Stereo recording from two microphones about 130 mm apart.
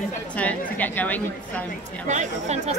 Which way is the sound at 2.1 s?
65° right (ahead or behind).